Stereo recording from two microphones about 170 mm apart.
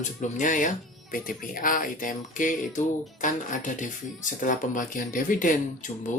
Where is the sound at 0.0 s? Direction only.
45° left (ahead or behind).